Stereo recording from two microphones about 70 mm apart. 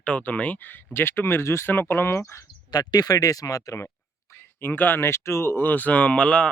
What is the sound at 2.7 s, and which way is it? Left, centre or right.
Speech, left.